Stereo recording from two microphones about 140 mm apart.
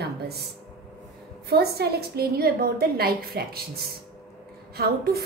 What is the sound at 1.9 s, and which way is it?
A woman's voice, 90° right.